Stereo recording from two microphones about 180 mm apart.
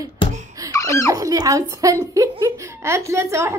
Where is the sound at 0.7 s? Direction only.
15° left (ahead or behind).